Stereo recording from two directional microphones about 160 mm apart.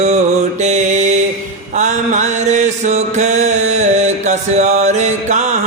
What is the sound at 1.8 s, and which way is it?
Mantra, 50° right (ahead or behind).